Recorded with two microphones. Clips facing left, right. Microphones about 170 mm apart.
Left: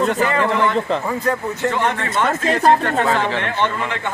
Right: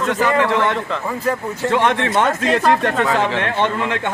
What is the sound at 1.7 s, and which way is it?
Speech, 80° right.